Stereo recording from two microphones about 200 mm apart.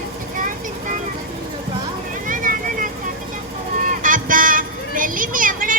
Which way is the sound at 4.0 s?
40° right (ahead or behind).